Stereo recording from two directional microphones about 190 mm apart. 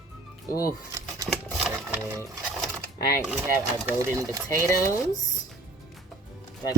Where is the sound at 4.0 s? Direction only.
15° right (ahead or behind).